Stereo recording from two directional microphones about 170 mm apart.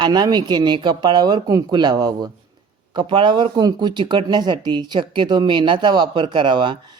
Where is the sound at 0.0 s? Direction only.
25° right (ahead or behind).